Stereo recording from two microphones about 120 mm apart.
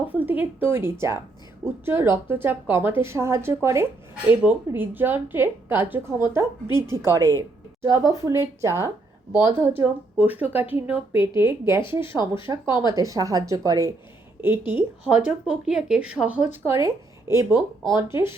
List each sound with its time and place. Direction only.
0.1 s a woman's voice: 15° right (ahead or behind); by 13.9 s 30° right (ahead or behind)
14.7 s a woman's voice: 10° right (ahead or behind)